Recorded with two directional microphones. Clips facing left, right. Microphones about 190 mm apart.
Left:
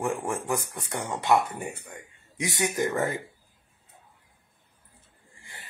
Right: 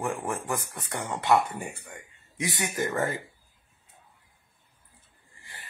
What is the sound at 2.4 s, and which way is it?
Speech, 20° left (ahead or behind).